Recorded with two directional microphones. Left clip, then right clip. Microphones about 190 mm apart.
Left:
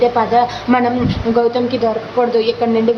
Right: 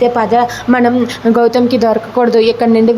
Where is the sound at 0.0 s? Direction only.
25° right (ahead or behind).